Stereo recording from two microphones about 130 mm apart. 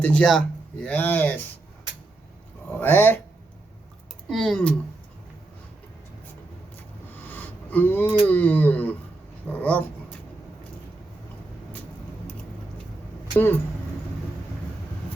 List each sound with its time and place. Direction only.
0.0 s speech: 10° left (ahead or behind)
2.8 s speech: 15° left (ahead or behind)
4.3 s speech: centre (ahead or behind)
7.2 s speech: 15° left (ahead or behind)
13.3 s speech: 15° left (ahead or behind)